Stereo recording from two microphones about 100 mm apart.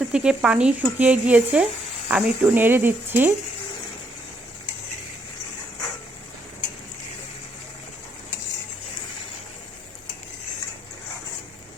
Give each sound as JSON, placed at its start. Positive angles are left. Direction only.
{"t": 0.0, "sound": "speech", "side_deg": -10}